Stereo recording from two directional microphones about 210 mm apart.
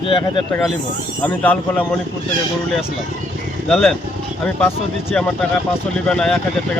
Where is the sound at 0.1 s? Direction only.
25° left (ahead or behind).